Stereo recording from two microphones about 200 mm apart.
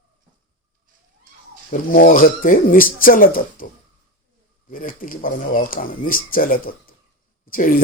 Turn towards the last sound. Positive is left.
turn(degrees=45)  # may be behind; listen again after turning